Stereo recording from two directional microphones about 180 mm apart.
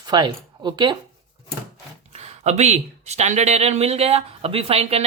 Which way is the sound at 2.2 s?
40° right (ahead or behind).